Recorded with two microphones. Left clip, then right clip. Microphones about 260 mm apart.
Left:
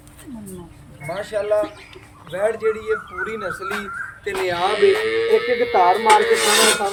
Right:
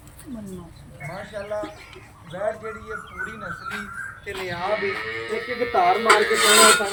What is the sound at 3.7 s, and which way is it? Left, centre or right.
Speech, left.